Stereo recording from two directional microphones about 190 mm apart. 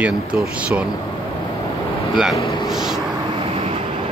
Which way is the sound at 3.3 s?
30° right (ahead or behind).